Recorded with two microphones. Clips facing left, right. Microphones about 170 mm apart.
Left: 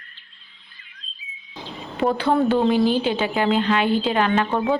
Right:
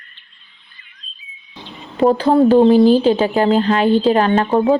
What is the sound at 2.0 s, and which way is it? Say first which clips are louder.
Speech: right 7 dB; 35° right (ahead or behind).